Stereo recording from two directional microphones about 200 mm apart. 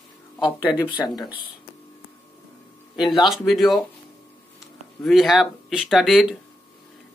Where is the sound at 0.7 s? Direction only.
20° left (ahead or behind).